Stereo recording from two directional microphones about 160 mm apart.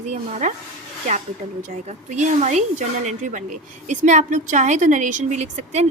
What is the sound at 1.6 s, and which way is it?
Speech, 50° right (ahead or behind).